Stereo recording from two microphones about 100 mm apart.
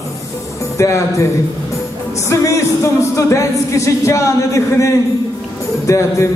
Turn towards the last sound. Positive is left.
turn(degrees=30)  # may be behind; listen again after turning